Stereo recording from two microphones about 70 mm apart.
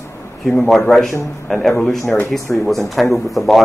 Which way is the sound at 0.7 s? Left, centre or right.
Centre.